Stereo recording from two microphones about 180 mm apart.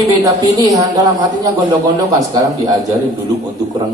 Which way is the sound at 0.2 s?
20° right (ahead or behind).